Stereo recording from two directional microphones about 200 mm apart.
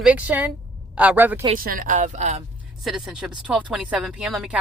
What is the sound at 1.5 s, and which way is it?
Speech, 45° right (ahead or behind).